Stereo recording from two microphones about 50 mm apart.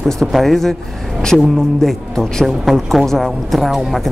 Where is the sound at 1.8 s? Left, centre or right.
Centre.